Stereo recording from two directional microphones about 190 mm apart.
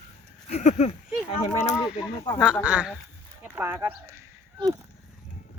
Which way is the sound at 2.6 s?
5° right (ahead or behind).